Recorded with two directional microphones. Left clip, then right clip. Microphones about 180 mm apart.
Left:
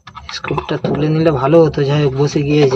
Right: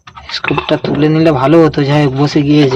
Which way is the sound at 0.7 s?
25° right (ahead or behind).